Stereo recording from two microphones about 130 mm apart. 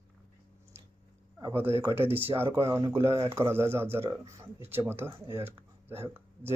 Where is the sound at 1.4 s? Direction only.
20° right (ahead or behind).